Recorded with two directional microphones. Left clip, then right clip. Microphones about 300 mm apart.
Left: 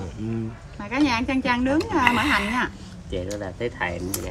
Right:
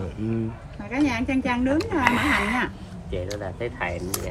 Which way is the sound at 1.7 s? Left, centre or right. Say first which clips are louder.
Left 1 dB; centre.